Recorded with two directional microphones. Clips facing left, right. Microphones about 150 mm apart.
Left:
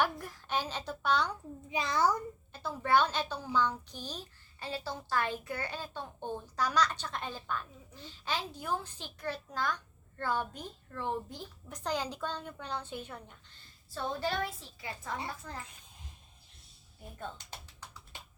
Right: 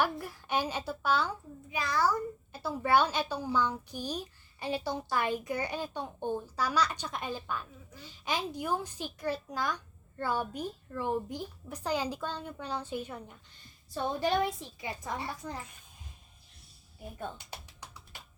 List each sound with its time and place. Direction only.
0.0 s a woman's voice: 10° right (ahead or behind)
1.7 s a child's voice: 20° left (ahead or behind)
2.5 s a woman's voice: 10° right (ahead or behind)
13.9 s a woman's voice: 20° right (ahead or behind)